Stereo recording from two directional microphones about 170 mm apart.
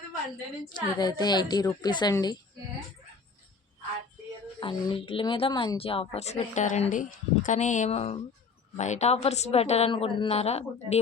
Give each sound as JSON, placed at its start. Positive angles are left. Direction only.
{"t": 0.7, "sound": "a woman's voice", "side_deg": 25}
{"t": 4.6, "sound": "a woman's voice", "side_deg": 30}